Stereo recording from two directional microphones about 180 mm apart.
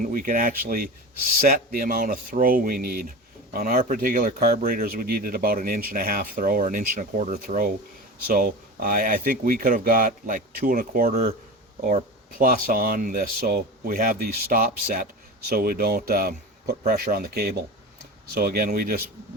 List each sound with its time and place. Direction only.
0.0 s speech: 50° right (ahead or behind)
12.4 s speech: 50° right (ahead or behind)